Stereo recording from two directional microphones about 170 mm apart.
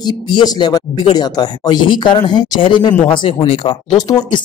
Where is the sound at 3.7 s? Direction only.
25° left (ahead or behind).